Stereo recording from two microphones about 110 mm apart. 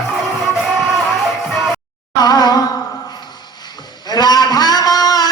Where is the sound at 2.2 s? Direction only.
40° left (ahead or behind).